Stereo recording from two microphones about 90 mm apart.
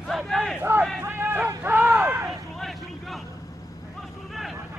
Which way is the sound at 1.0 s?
25° right (ahead or behind).